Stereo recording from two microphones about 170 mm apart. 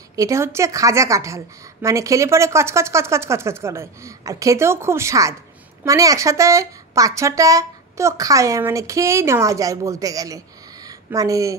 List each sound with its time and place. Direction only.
0.1 s a woman's voice: 20° right (ahead or behind)